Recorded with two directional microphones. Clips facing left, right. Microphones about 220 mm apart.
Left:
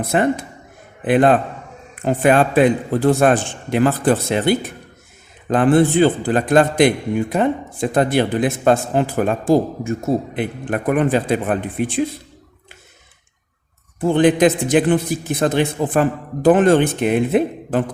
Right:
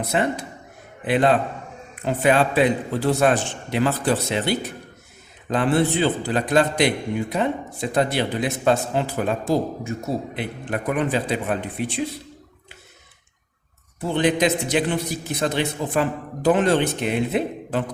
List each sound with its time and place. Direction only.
0.1 s a man's voice: 50° left (ahead or behind)
14.0 s a man's voice: 50° left (ahead or behind)